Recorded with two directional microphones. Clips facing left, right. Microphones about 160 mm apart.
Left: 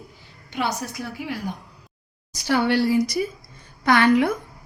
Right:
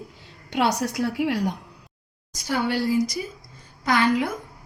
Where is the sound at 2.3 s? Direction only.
75° left (ahead or behind).